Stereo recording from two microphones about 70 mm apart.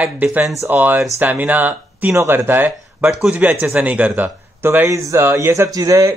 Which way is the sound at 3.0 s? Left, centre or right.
Centre.